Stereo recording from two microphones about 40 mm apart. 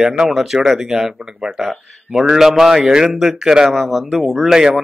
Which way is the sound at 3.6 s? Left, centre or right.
Centre.